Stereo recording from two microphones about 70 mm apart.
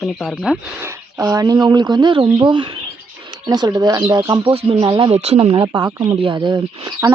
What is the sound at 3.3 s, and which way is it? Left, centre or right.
Speech, right.